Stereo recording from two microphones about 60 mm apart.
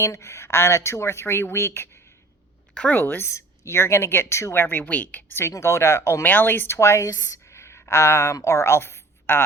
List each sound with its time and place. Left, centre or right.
0.0 s speech: left
3.2 s speech: left
5.5 s speech: left
6.2 s speech: left
6.7 s speech: left
7.1 s speech: left
7.4 s a sound: left
8.3 s a woman's voice: left